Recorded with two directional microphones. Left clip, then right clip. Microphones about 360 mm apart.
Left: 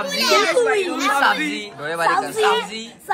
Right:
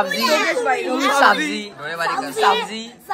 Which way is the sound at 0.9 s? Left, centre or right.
Right.